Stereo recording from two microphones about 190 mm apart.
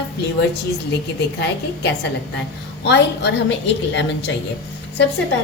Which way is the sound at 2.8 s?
65° left (ahead or behind).